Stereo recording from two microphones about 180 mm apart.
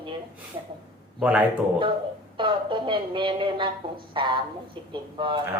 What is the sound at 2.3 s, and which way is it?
Speech, 25° right (ahead or behind).